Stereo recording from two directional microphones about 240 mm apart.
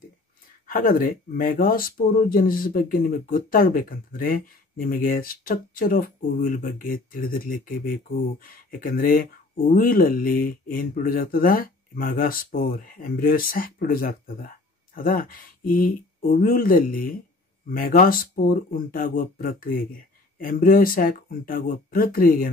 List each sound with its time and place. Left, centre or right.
0.7 s speech: left